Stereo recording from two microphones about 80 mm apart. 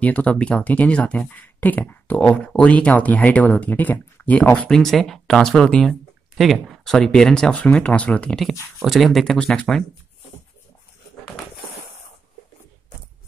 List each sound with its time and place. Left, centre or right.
0.0 s speech: centre
4.6 s speech: centre
8.4 s speech: centre